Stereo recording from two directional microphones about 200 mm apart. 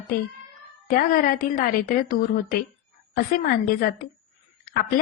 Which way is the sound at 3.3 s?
45° left (ahead or behind).